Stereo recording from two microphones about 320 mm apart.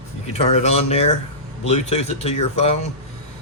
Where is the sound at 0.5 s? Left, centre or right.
Centre.